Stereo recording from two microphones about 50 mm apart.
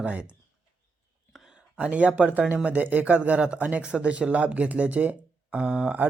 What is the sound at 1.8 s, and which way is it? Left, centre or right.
Speech, right.